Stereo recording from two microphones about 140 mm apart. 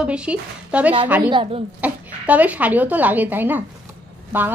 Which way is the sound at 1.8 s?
10° right (ahead or behind).